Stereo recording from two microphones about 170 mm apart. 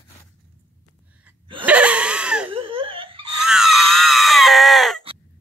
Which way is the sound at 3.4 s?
5° right (ahead or behind).